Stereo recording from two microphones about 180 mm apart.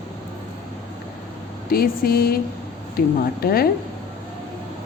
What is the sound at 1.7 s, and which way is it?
Speech, 55° left (ahead or behind).